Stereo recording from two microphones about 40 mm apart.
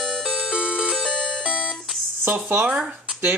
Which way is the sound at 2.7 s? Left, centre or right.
Right.